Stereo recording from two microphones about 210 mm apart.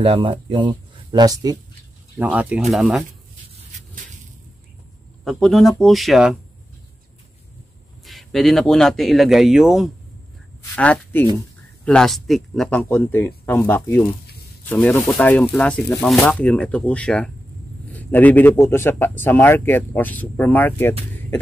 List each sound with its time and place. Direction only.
0.0 s speech: 25° right (ahead or behind)
2.1 s speech: 5° right (ahead or behind)
5.2 s speech: centre (ahead or behind)
8.0 s speech: centre (ahead or behind)
10.8 s speech: 10° left (ahead or behind)
14.2 s a sound: 50° left (ahead or behind)
14.7 s speech: 10° left (ahead or behind)